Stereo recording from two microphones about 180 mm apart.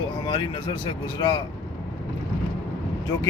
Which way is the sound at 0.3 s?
25° left (ahead or behind).